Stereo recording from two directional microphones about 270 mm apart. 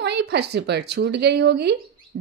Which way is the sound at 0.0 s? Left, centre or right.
Right.